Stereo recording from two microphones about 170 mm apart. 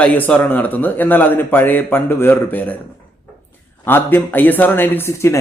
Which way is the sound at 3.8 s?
10° left (ahead or behind).